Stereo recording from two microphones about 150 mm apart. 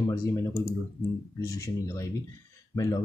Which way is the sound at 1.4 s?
20° left (ahead or behind).